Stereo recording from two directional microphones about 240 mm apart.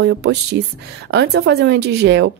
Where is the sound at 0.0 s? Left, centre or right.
Right.